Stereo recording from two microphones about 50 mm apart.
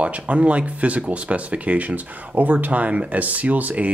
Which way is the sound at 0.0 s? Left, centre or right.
Right.